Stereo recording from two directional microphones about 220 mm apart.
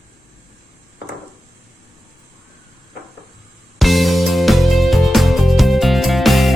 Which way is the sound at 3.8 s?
Centre (ahead or behind).